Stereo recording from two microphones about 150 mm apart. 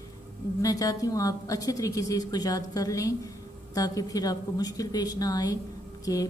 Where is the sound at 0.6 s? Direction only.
25° left (ahead or behind).